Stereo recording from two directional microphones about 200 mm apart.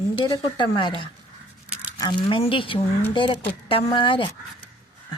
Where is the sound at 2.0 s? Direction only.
25° left (ahead or behind).